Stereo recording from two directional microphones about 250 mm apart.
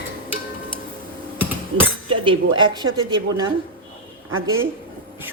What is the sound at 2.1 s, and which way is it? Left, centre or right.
A woman's voice, centre.